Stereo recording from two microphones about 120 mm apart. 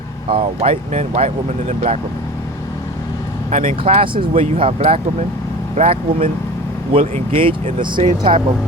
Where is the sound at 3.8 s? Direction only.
50° right (ahead or behind).